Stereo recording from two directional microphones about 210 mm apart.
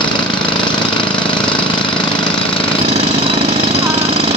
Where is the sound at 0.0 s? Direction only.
20° left (ahead or behind).